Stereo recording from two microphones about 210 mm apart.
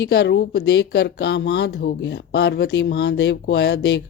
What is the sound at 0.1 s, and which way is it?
Speech, 50° left (ahead or behind).